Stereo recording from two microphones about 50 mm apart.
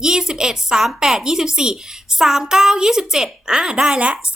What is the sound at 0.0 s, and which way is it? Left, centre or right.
Speech, centre.